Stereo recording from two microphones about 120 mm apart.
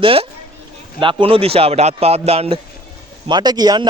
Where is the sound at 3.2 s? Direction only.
35° right (ahead or behind).